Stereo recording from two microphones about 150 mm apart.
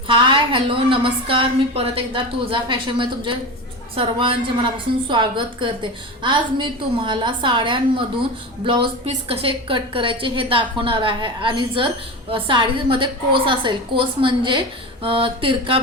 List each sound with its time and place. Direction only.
0.1 s a woman's voice: 35° right (ahead or behind)